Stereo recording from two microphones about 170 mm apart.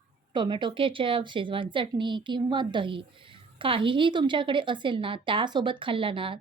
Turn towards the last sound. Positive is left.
turn(degrees=-30)  # may be behind; listen again after turning